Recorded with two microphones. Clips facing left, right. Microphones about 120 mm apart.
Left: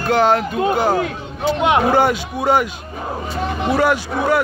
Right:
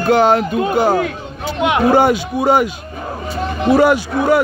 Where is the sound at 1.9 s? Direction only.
10° right (ahead or behind).